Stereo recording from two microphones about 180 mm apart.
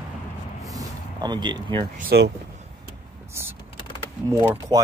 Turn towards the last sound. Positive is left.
turn(degrees=-15)  # may be behind; listen again after turning